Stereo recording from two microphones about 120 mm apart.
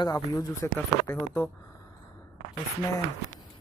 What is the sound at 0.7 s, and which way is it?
Speech, 15° left (ahead or behind).